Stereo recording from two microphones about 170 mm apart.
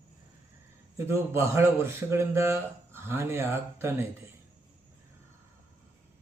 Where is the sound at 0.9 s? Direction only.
15° right (ahead or behind).